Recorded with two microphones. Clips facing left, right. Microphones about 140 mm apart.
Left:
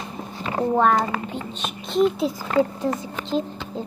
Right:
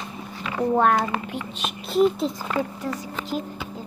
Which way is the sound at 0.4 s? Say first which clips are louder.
Left 2 dB; 35° left (ahead or behind).